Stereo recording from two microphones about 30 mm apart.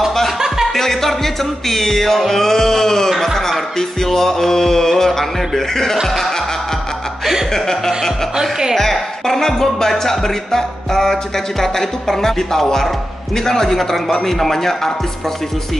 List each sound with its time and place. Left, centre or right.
0.7 s music: centre
7.5 s music: centre
8.4 s speech: centre
9.2 s music: centre